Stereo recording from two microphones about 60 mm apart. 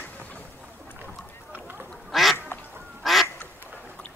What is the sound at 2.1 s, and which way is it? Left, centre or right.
Duck, centre.